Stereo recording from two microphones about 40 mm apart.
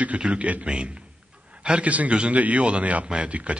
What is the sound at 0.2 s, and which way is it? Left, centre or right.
A man's voice, right.